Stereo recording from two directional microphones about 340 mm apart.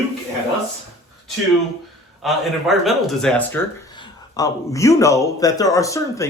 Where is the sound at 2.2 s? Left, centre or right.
Centre.